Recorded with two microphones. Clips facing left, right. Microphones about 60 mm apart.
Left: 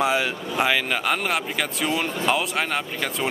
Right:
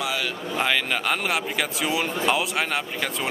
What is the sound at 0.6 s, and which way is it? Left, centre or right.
A man's voice, centre.